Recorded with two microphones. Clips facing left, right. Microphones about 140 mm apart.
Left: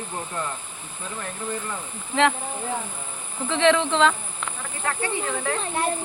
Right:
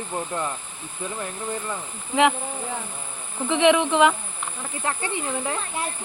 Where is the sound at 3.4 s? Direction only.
15° right (ahead or behind).